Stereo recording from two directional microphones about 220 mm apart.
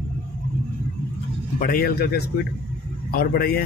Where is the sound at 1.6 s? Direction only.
40° left (ahead or behind).